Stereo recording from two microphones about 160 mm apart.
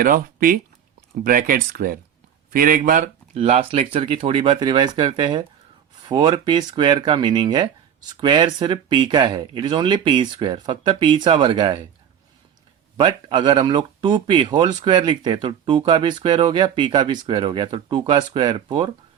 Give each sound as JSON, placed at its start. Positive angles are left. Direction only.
{"t": 0.0, "sound": "speech", "side_deg": -65}
{"t": 3.3, "sound": "speech", "side_deg": -40}
{"t": 13.0, "sound": "speech", "side_deg": -30}